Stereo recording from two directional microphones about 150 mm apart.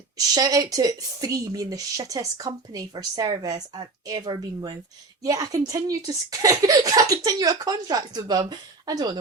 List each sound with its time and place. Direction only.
0.3 s speech: 25° right (ahead or behind)